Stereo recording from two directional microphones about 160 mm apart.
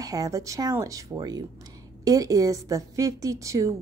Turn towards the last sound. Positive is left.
turn(degrees=-20)  # may be behind; listen again after turning